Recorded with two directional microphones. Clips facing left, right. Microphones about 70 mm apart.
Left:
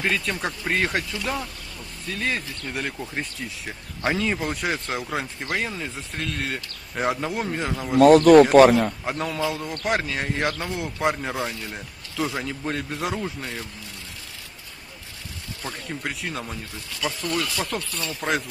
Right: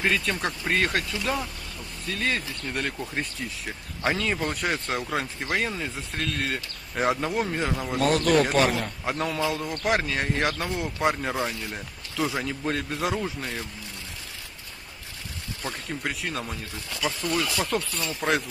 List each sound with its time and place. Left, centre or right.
0.0 s speech: centre
15.6 s speech: centre